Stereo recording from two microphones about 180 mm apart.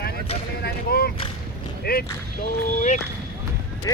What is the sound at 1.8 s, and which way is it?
Speech, 60° left (ahead or behind).